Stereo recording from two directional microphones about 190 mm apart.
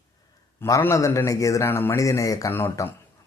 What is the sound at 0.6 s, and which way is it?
Speech, 15° left (ahead or behind).